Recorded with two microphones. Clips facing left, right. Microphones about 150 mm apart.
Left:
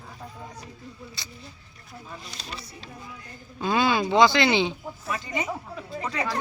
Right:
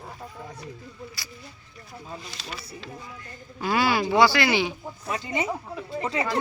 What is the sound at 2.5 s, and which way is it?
Speech, 35° left (ahead or behind).